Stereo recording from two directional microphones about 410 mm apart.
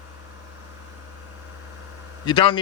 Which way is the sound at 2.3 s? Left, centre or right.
Centre.